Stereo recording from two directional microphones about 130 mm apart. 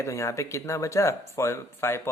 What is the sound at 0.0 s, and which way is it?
Speech, 25° left (ahead or behind).